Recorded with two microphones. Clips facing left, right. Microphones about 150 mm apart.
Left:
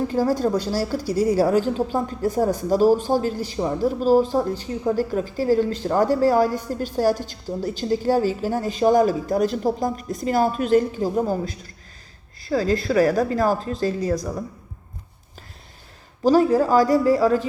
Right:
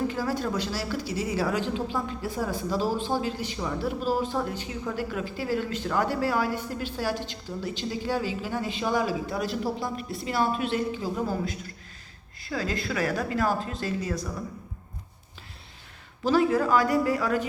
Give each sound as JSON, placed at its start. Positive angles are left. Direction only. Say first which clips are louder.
{"t": 0.1, "sound": "a woman's voice", "louder": "left 8 dB", "side_deg": 40}
{"t": 16.2, "sound": "a woman's voice", "louder": "left 6 dB", "side_deg": 40}